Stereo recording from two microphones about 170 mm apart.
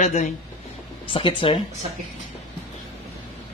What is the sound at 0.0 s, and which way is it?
Speech, 40° left (ahead or behind).